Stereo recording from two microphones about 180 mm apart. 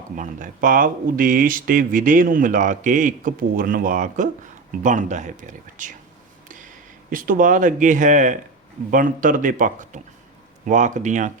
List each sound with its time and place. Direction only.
0.2 s speech: 45° right (ahead or behind)
7.1 s speech: 50° right (ahead or behind)